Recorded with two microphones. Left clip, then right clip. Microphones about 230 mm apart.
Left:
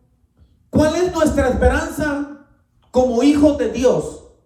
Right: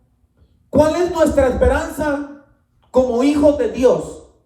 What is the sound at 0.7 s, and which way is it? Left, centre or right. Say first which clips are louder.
A man's voice: right 2 dB; right.